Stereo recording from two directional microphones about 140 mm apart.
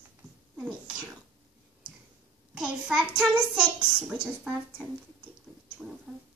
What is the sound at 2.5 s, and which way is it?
A child's voice, 5° right (ahead or behind).